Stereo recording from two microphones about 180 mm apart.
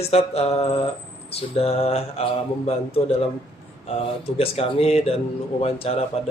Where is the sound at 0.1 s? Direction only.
35° left (ahead or behind).